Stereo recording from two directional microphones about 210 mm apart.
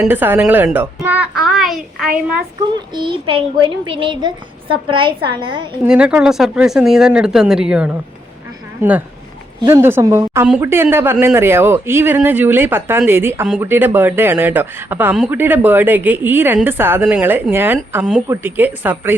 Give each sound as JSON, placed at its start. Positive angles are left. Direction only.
{"t": 0.0, "sound": "speech", "side_deg": -10}
{"t": 2.7, "sound": "a woman's voice", "side_deg": -20}
{"t": 5.8, "sound": "speech", "side_deg": -5}